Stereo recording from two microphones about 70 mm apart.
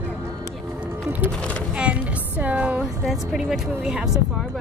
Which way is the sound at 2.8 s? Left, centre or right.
Centre.